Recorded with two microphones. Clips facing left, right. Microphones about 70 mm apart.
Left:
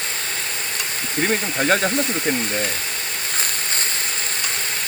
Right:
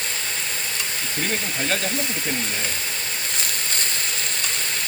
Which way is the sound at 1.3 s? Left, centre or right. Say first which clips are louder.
Left 7 dB; left.